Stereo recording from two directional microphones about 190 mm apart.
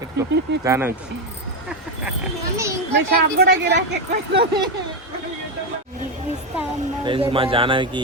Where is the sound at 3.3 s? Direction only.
55° right (ahead or behind).